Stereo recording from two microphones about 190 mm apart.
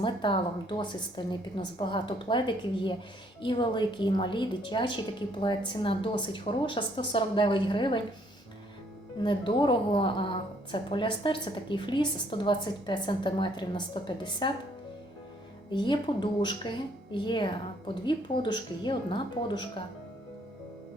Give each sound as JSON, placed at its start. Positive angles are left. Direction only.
{"t": 0.0, "sound": "a woman's voice", "side_deg": 25}
{"t": 9.2, "sound": "a woman's voice", "side_deg": 25}
{"t": 15.7, "sound": "a woman's voice", "side_deg": 25}